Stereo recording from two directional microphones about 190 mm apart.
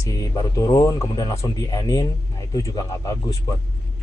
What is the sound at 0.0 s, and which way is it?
Speech, 20° left (ahead or behind).